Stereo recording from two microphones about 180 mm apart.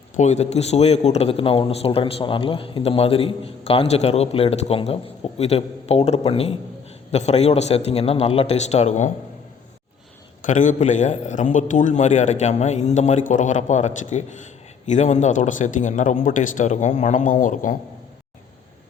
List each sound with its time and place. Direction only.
0.2 s a man's voice: 40° left (ahead or behind)
10.4 s a man's voice: 45° left (ahead or behind)